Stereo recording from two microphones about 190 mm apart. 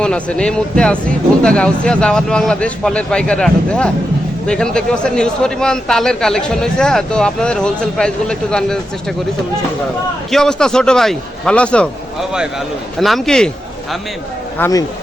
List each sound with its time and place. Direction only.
0.0 s speech: 5° left (ahead or behind)
10.3 s speech: 5° left (ahead or behind)
13.0 s speech: centre (ahead or behind)
14.6 s speech: 20° left (ahead or behind)